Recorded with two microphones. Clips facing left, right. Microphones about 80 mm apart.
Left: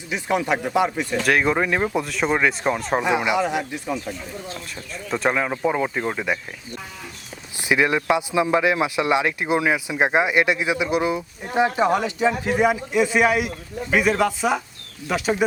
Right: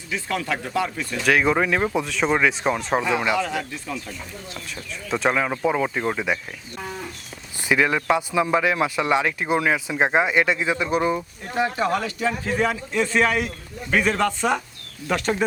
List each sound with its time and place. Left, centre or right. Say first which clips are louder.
0.1 s speech: left 4 dB; centre
1.2 s speech: right 1 dB; centre
3.0 s speech: left 2 dB; centre
5.0 s speech: even; centre
7.6 s speech: left 1 dB; centre